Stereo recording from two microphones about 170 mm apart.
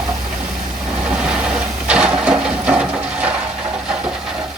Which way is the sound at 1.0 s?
5° right (ahead or behind).